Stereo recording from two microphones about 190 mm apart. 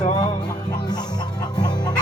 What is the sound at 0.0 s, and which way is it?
Music, 20° left (ahead or behind).